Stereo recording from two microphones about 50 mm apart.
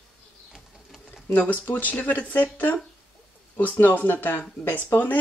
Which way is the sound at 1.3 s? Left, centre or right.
Left.